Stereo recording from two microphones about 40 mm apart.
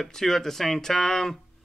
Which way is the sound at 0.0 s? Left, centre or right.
Centre.